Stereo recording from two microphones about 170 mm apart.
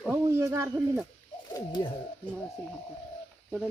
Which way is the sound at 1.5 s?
30° left (ahead or behind).